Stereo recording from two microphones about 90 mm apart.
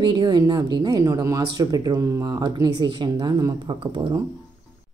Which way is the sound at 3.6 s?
65° right (ahead or behind).